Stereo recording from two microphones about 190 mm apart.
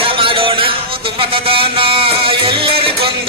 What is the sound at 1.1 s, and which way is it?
Music, 30° right (ahead or behind).